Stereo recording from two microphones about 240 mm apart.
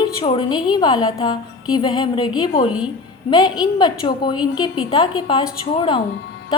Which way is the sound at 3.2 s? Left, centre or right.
Centre.